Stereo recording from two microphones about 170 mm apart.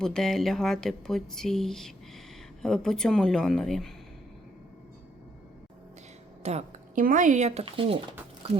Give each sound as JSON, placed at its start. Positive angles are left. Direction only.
{"t": 0.0, "sound": "speech", "side_deg": 5}
{"t": 6.4, "sound": "a sound", "side_deg": -40}
{"t": 7.0, "sound": "speech", "side_deg": -50}